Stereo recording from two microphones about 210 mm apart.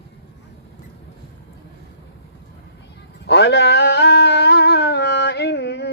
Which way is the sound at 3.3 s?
55° left (ahead or behind).